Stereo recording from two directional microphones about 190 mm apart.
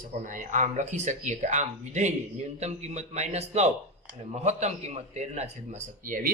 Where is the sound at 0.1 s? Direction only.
40° right (ahead or behind).